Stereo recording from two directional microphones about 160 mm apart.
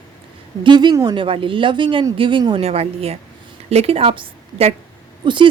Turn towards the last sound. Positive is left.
turn(degrees=-30)  # may be behind; listen again after turning